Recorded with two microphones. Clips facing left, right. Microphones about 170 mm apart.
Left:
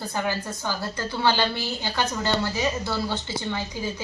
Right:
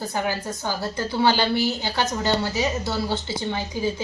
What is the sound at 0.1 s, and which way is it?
A woman's voice, 20° right (ahead or behind).